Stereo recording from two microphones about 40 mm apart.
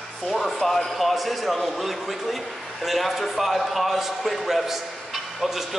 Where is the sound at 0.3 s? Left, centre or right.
Centre.